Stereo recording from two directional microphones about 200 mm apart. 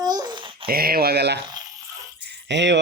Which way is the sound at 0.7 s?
50° right (ahead or behind).